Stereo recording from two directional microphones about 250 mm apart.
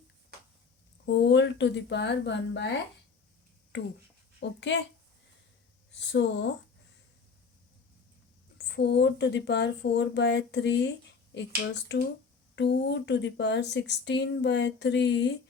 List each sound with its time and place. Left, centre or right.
1.0 s speech: left
3.7 s speech: left
5.9 s speech: left
8.5 s speech: left